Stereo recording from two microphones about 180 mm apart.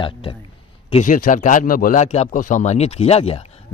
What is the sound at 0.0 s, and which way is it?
Speech, 30° left (ahead or behind).